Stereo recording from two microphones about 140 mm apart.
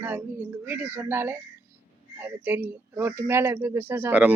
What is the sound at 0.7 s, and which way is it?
Speech, 15° right (ahead or behind).